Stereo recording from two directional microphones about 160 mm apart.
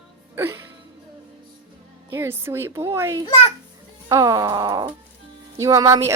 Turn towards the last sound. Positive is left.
turn(degrees=-20)  # may be behind; listen again after turning